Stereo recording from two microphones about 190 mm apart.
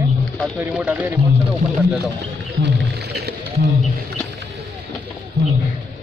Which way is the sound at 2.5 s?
60° right (ahead or behind).